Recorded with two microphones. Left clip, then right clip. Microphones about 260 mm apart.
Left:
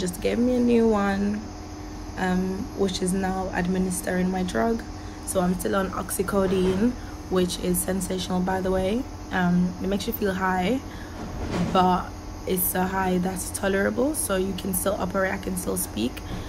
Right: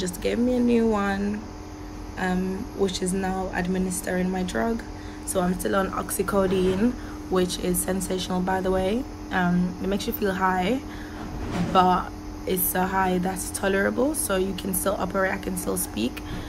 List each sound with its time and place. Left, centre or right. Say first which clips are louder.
0.0 s speech: left 1 dB; centre
5.3 s a woman's voice: even; centre